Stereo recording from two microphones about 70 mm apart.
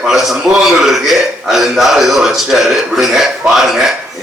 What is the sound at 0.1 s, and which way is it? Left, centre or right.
A man's voice, centre.